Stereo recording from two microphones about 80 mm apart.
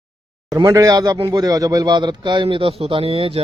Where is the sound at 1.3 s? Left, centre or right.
Right.